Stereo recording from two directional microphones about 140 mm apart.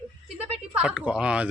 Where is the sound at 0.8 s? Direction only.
5° right (ahead or behind).